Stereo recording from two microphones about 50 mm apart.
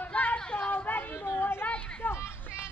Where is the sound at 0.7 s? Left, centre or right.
Left.